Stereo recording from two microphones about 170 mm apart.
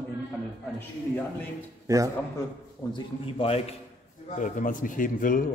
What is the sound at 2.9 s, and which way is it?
Speech, 35° left (ahead or behind).